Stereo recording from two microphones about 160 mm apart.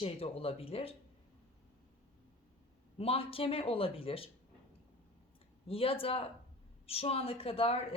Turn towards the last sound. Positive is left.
turn(degrees=35)  # may be behind; listen again after turning